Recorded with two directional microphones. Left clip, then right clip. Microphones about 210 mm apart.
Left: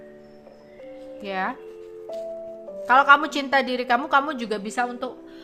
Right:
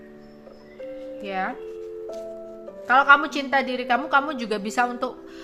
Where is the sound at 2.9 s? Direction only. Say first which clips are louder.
Even; 10° left (ahead or behind).